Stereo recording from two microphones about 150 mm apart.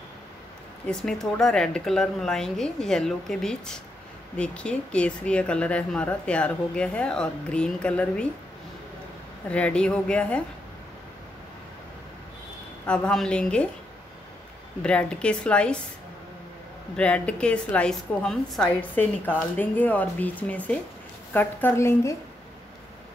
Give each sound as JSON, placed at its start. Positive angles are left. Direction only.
{"t": 0.8, "sound": "speech", "side_deg": 5}
{"t": 9.5, "sound": "speech", "side_deg": 10}
{"t": 12.8, "sound": "speech", "side_deg": 5}
{"t": 14.8, "sound": "speech", "side_deg": 5}
{"t": 16.9, "sound": "speech", "side_deg": 5}